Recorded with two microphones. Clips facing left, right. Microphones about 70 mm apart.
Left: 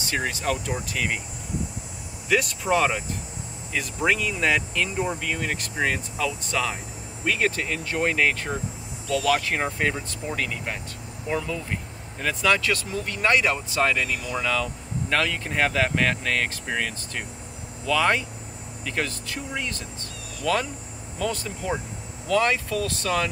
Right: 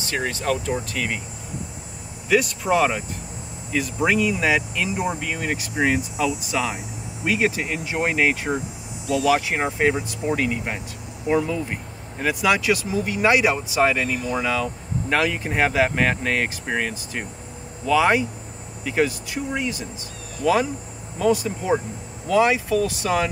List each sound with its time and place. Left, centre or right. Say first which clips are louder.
0.1 s speech: right 2 dB; centre
2.2 s speech: right 3 dB; centre